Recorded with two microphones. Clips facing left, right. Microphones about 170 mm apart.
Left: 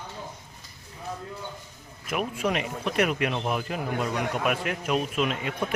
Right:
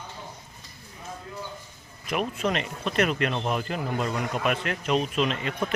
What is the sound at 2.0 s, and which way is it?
Speech, 5° left (ahead or behind).